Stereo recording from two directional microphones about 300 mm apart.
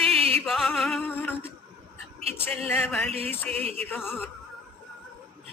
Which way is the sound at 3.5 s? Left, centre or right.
Centre.